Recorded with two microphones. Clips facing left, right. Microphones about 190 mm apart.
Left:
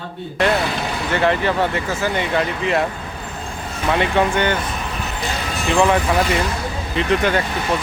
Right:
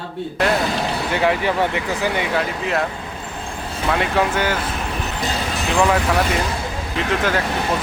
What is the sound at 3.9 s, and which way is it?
Speech, centre (ahead or behind).